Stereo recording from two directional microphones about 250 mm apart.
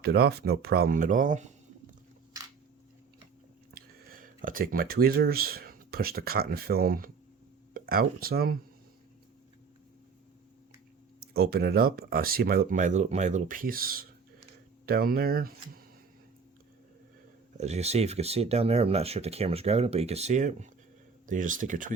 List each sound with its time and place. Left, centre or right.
0.0 s speech: right
3.8 s speech: right
11.3 s speech: right
17.6 s speech: right